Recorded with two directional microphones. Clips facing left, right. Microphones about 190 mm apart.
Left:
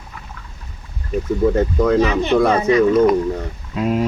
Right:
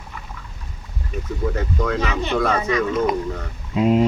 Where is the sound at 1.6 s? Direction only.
30° left (ahead or behind).